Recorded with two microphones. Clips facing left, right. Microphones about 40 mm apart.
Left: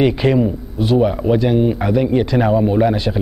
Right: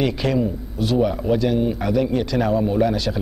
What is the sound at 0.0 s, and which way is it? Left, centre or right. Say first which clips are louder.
Speech: left 6 dB; left.